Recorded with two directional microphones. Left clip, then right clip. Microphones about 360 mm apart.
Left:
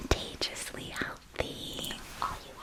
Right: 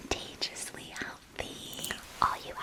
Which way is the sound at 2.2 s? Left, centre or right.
Right.